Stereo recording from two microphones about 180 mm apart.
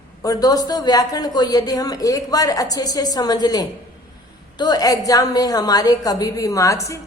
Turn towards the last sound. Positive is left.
turn(degrees=15)  # may be behind; listen again after turning